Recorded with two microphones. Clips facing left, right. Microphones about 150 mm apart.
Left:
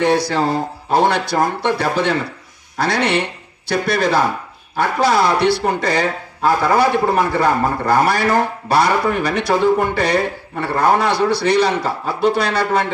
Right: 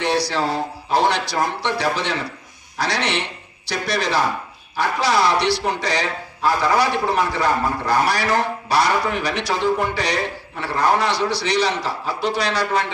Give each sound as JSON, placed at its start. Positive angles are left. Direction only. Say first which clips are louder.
{"t": 0.0, "sound": "speech", "louder": "left 5 dB", "side_deg": 50}